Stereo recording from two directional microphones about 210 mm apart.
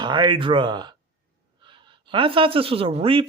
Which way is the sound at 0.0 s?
20° right (ahead or behind).